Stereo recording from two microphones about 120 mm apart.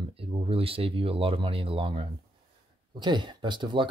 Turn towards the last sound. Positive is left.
turn(degrees=-40)  # may be behind; listen again after turning